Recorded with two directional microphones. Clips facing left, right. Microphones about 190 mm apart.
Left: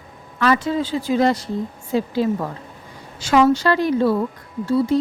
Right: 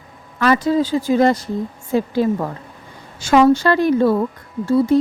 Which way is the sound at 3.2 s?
50° right (ahead or behind).